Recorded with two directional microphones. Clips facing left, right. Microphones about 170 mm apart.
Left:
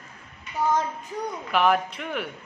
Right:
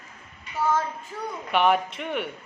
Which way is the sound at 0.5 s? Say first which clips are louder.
Left 1 dB; 20° left (ahead or behind).